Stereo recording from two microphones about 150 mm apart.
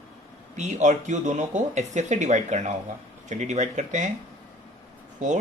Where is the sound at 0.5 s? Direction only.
50° right (ahead or behind).